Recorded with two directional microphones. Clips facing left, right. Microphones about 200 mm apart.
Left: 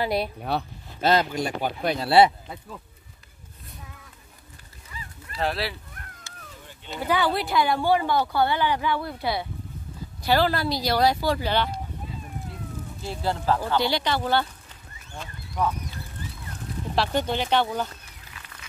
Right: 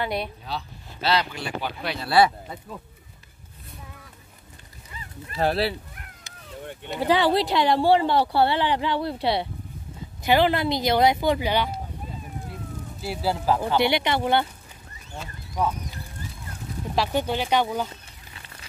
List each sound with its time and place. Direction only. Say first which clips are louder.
0.0 s speech: left 3 dB; 35° left (ahead or behind)
0.4 s speech: left 6 dB; 60° left (ahead or behind)
2.0 s speech: left 2 dB; 25° left (ahead or behind)
2.4 s speech: right 2 dB; centre (ahead or behind)
5.4 s speech: right 4 dB; 35° right (ahead or behind)
6.3 s cat: left 1 dB; 20° right (ahead or behind)
6.6 s a sound: right 11 dB; 60° right (ahead or behind)
7.0 s speech: right 4 dB; 30° right (ahead or behind)
10.2 s speech: right 2 dB; 20° right (ahead or behind)
13.0 s speech: right 2 dB; 5° right (ahead or behind)
13.6 s speech: right 2 dB; 20° right (ahead or behind)
15.1 s a sound: right 1 dB; 10° right (ahead or behind)
16.9 s speech: even; 10° right (ahead or behind)
18.3 s a sound: right 1 dB; 30° right (ahead or behind)